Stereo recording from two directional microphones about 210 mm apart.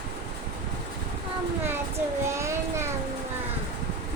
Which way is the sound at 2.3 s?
15° right (ahead or behind).